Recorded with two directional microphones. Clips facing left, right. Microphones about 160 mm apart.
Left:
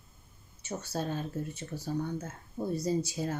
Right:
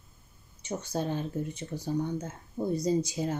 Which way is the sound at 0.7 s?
15° right (ahead or behind).